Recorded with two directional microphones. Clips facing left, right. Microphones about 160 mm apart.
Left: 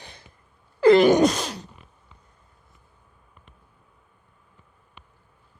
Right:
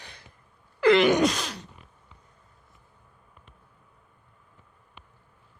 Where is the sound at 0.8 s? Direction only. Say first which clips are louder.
Left 4 dB; 35° left (ahead or behind).